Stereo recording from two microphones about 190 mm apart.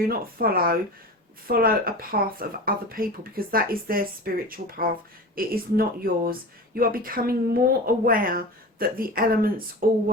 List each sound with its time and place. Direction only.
0.0 s speech: 50° right (ahead or behind)